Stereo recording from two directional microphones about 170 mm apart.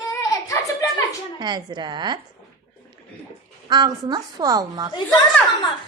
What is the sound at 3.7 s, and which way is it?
A woman's voice, 25° right (ahead or behind).